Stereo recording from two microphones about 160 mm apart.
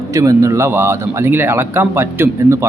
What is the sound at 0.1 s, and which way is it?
A man's voice, 20° right (ahead or behind).